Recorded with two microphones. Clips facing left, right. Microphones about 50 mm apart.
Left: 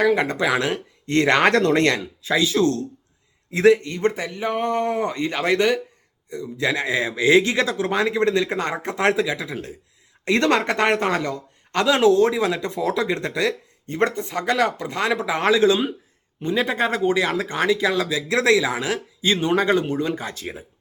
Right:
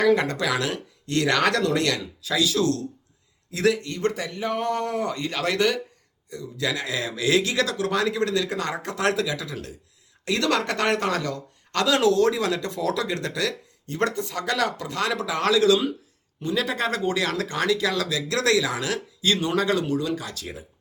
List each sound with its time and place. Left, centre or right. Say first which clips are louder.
0.0 s speech: left 2 dB; centre